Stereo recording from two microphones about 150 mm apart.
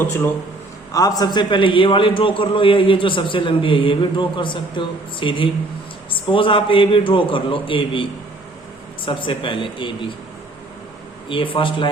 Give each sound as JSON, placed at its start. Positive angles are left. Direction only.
{"t": 0.9, "sound": "a man's voice", "side_deg": 25}
{"t": 11.3, "sound": "a man's voice", "side_deg": 35}